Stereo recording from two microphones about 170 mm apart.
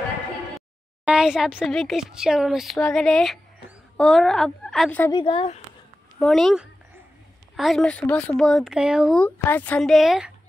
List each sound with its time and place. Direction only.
0.6 s a woman's voice: 5° right (ahead or behind)
5.1 s speech: 30° left (ahead or behind)
6.1 s speech: centre (ahead or behind)
9.2 s speech: 10° left (ahead or behind)